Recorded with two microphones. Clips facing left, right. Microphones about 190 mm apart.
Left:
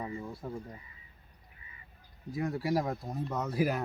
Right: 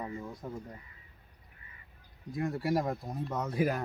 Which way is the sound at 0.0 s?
10° left (ahead or behind).